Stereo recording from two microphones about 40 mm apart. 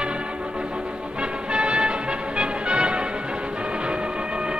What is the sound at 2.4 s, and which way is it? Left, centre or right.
Music, right.